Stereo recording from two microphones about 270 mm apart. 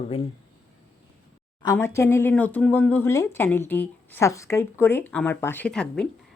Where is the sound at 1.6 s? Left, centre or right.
Centre.